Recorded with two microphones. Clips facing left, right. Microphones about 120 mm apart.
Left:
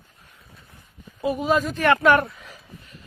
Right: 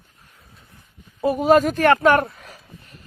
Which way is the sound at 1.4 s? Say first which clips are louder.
Right 7 dB; 50° right (ahead or behind).